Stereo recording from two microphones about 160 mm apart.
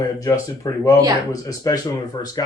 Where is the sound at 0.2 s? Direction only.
20° left (ahead or behind).